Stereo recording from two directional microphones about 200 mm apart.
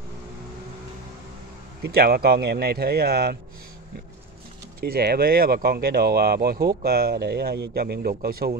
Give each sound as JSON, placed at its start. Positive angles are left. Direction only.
{"t": 1.8, "sound": "speech", "side_deg": -50}
{"t": 4.7, "sound": "speech", "side_deg": -50}